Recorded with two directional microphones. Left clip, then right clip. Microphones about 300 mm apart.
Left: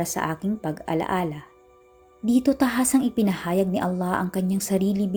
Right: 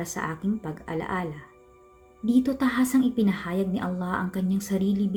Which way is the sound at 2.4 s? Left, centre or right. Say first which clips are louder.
Left 3 dB; centre.